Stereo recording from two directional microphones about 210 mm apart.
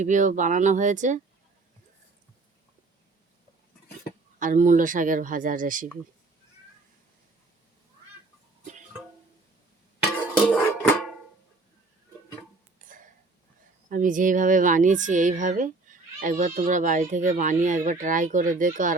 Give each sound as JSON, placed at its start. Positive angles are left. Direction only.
{"t": 0.0, "sound": "a woman's voice", "side_deg": -35}
{"t": 4.4, "sound": "a woman's voice", "side_deg": -40}
{"t": 10.4, "sound": "music", "side_deg": 5}
{"t": 12.8, "sound": "a sound", "side_deg": -40}
{"t": 13.9, "sound": "a woman's voice", "side_deg": -40}